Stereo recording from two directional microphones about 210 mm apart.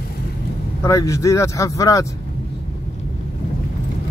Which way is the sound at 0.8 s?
15° left (ahead or behind).